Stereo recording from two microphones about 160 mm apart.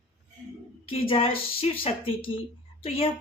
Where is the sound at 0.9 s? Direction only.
35° left (ahead or behind).